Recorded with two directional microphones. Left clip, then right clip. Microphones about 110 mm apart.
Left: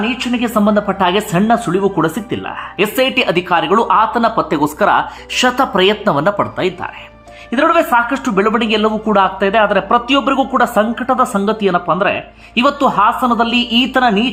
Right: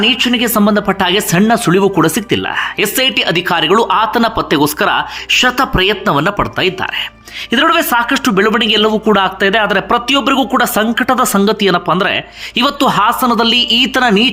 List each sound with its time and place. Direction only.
0.0 s speech: 25° right (ahead or behind)
1.5 s speech: 30° right (ahead or behind)
2.9 s speech: 15° right (ahead or behind)
3.5 s speech: 35° right (ahead or behind)
4.4 s speech: 20° right (ahead or behind)